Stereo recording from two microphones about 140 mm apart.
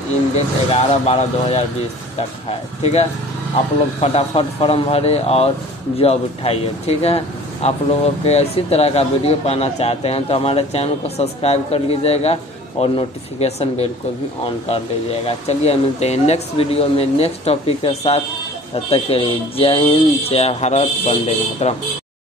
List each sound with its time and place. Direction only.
0.7 s speech: 45° left (ahead or behind)
2.8 s speech: 50° left (ahead or behind)
15.2 s speech: 45° left (ahead or behind)